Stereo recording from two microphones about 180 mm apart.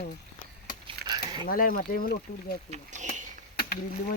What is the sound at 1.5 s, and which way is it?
Speech, 50° left (ahead or behind).